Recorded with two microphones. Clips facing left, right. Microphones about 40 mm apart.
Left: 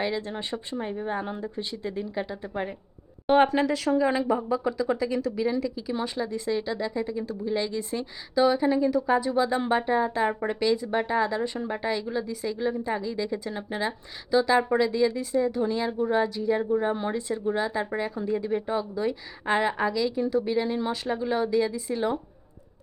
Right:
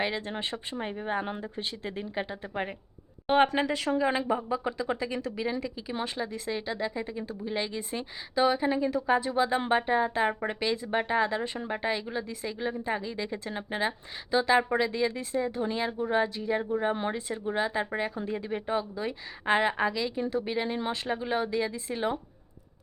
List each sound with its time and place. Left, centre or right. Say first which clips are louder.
0.7 s speech: left 2 dB; right